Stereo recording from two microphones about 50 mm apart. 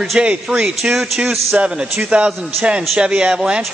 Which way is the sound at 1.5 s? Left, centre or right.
Right.